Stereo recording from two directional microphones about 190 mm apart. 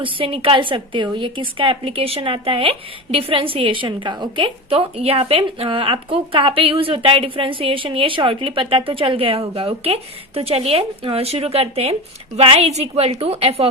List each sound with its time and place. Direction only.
0.0 s a woman's voice: 25° right (ahead or behind)